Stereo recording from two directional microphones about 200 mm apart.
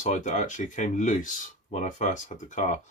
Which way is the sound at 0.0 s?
35° left (ahead or behind).